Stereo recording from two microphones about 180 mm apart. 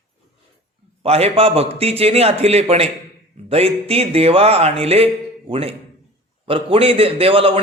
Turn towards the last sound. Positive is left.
turn(degrees=-30)  # may be behind; listen again after turning